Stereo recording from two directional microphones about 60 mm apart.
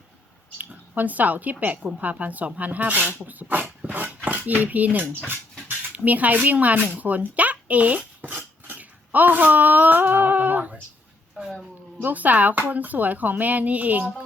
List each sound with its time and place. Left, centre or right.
0.6 s speech: right
11.4 s a sound: centre
12.0 s speech: right